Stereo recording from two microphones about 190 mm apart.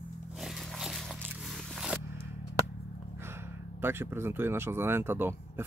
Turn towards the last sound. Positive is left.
turn(degrees=-10)  # may be behind; listen again after turning